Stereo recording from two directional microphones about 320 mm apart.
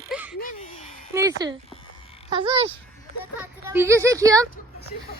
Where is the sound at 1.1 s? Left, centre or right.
Centre.